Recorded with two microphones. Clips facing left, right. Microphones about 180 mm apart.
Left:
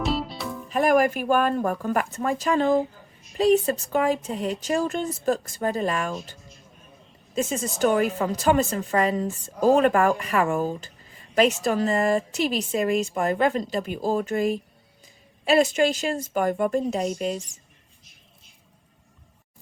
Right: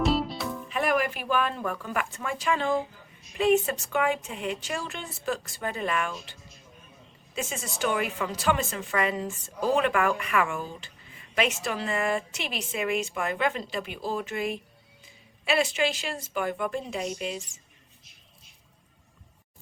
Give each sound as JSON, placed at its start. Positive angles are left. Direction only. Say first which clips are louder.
{"t": 0.0, "sound": "music", "louder": "right 1 dB", "side_deg": 0}
{"t": 0.7, "sound": "speech", "louder": "left 7 dB", "side_deg": 45}
{"t": 7.3, "sound": "speech", "louder": "left 8 dB", "side_deg": 40}